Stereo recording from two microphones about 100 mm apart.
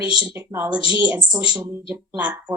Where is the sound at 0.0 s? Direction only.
15° right (ahead or behind).